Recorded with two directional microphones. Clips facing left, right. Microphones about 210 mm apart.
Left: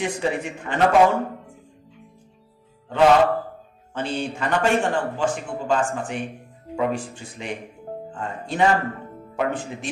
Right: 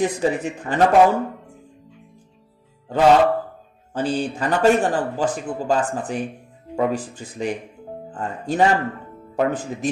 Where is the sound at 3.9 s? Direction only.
35° right (ahead or behind).